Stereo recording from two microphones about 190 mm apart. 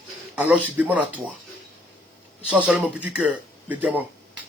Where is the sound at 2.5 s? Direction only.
5° right (ahead or behind).